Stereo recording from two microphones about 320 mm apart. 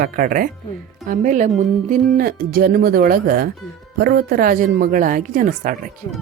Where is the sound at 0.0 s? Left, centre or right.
Right.